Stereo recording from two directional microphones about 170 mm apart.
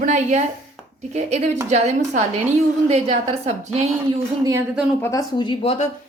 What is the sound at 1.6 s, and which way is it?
A woman's voice, 45° right (ahead or behind).